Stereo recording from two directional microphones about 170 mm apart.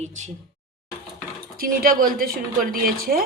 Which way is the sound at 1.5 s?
55° right (ahead or behind).